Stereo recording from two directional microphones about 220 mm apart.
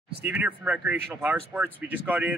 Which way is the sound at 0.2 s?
5° right (ahead or behind).